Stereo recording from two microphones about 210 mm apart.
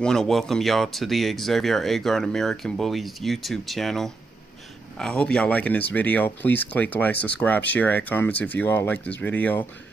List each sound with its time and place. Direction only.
0.0 s speech: 5° left (ahead or behind)